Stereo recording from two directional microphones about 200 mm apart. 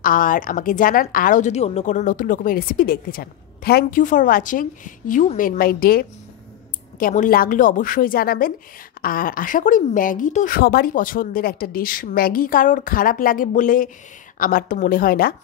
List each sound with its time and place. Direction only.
0.0 s a woman's voice: 45° left (ahead or behind)